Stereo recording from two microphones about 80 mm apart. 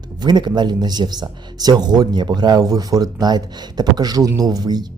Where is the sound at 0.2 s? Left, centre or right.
Right.